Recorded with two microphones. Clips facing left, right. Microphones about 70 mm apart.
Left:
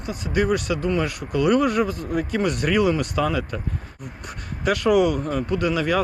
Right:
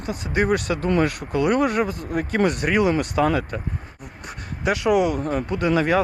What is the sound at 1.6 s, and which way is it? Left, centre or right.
Speech, right.